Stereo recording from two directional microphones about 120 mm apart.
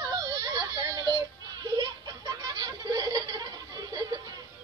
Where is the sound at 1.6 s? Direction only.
35° right (ahead or behind).